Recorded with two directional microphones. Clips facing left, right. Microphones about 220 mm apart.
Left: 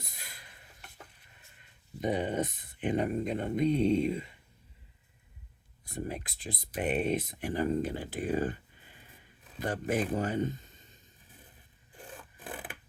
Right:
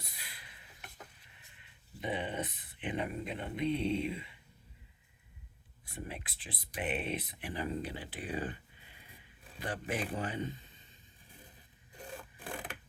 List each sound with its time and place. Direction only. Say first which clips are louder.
0.0 s a sound: left 3 dB; 45° left (ahead or behind)
1.5 s speech: left 7 dB; 45° left (ahead or behind)
5.8 s speech: left 7 dB; 40° left (ahead or behind)
9.6 s speech: left 6 dB; 45° left (ahead or behind)